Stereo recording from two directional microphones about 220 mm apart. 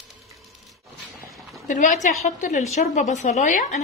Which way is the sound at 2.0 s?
35° left (ahead or behind).